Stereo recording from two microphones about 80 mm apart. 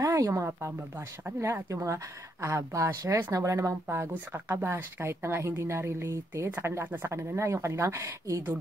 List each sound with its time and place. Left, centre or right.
0.0 s speech: right
4.1 s speech: right